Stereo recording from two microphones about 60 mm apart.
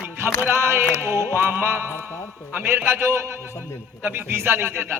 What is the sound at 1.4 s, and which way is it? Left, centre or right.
Music, right.